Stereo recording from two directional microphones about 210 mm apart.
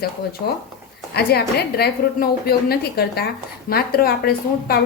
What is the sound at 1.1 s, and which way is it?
A woman's voice, 50° left (ahead or behind).